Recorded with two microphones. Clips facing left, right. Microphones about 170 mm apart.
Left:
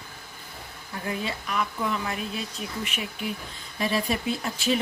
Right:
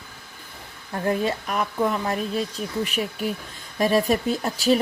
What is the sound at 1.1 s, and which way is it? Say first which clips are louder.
Speech: right 7 dB; 45° right (ahead or behind).